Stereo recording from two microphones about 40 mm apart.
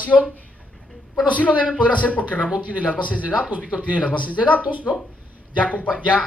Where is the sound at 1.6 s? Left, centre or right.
Left.